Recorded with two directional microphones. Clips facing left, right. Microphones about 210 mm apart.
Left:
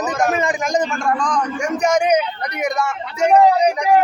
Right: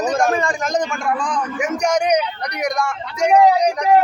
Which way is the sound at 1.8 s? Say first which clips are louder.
Left 2 dB; 5° left (ahead or behind).